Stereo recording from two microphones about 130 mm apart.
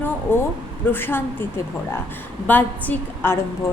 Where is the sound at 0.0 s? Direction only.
15° left (ahead or behind).